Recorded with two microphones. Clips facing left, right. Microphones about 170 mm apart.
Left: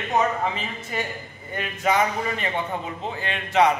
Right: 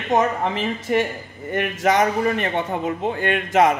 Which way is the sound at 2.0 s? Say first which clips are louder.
Right 5 dB; 50° right (ahead or behind).